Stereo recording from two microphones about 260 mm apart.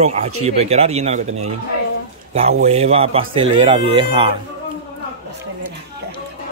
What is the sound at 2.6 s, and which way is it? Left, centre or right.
Speech, right.